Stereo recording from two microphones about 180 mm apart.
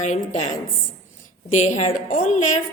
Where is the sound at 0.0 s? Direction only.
40° left (ahead or behind).